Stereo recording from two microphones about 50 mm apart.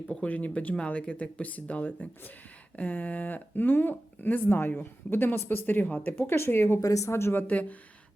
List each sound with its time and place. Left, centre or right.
0.3 s speech: left
6.1 s speech: left
6.9 s speech: left
7.4 s speech: left